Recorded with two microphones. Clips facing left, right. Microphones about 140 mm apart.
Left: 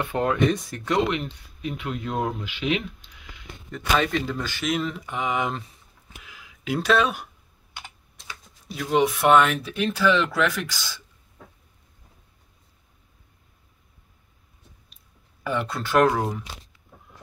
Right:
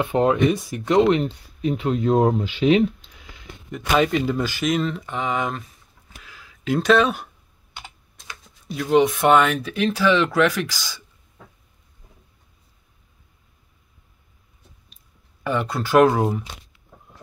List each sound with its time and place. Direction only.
0.0 s speech: 20° right (ahead or behind)
3.7 s speech: 15° right (ahead or behind)
4.7 s speech: 10° left (ahead or behind)
6.1 s a sound: 15° left (ahead or behind)
8.6 s speech: centre (ahead or behind)
15.4 s speech: centre (ahead or behind)